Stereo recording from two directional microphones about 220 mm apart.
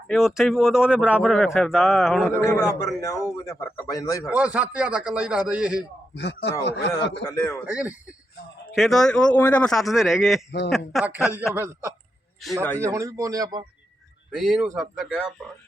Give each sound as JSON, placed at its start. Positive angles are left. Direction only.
{"t": 0.1, "sound": "speech", "side_deg": 0}
{"t": 2.4, "sound": "a man's voice", "side_deg": 15}
{"t": 4.3, "sound": "speech", "side_deg": -5}
{"t": 6.1, "sound": "speech", "side_deg": 50}
{"t": 7.3, "sound": "a man's voice", "side_deg": 10}
{"t": 7.7, "sound": "a man's voice", "side_deg": -5}
{"t": 12.8, "sound": "a man's voice", "side_deg": -15}
{"t": 14.3, "sound": "speech", "side_deg": 0}